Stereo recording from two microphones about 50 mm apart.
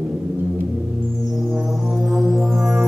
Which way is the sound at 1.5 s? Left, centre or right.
Centre.